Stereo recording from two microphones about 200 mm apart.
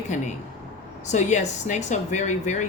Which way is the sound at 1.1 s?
35° left (ahead or behind).